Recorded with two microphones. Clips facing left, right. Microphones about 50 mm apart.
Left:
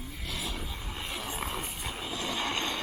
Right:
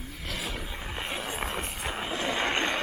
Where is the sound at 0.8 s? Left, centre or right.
Right.